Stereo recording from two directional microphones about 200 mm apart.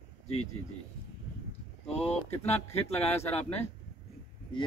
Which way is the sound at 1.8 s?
30° left (ahead or behind).